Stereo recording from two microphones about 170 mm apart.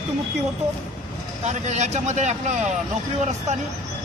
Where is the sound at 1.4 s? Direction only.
40° right (ahead or behind).